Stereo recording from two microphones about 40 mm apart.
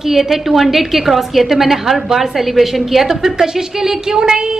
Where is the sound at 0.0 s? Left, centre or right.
Centre.